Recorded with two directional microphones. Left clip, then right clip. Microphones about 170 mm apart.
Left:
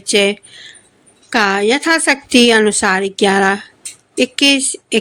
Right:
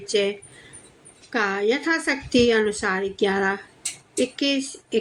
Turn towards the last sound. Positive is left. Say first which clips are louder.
# left 9 dB
turn(degrees=50)  # may be behind; listen again after turning